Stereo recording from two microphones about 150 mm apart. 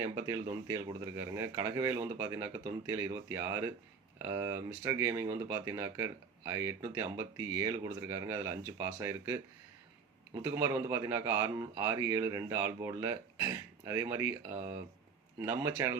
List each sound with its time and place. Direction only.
0.0 s speech: 20° right (ahead or behind)
10.4 s speech: 20° right (ahead or behind)